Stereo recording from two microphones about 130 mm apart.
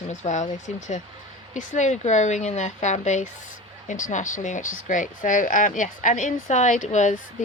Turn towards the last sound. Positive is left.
turn(degrees=65)  # may be behind; listen again after turning